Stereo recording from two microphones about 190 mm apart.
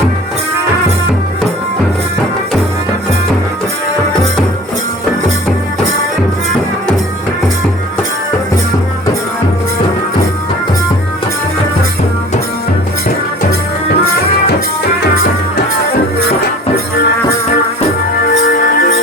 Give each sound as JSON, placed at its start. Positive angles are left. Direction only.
{"t": 18.3, "sound": "music", "side_deg": 55}